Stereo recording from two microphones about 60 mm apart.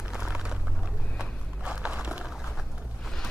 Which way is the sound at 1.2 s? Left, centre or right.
Centre.